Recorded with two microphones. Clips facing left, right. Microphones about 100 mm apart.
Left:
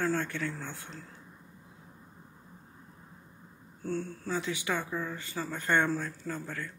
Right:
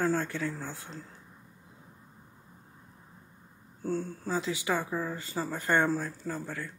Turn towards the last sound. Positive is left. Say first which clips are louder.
# right 2 dB
turn(degrees=-15)  # may be behind; listen again after turning